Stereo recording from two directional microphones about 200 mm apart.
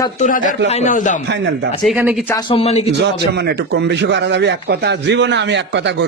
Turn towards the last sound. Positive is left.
turn(degrees=-60)  # may be behind; listen again after turning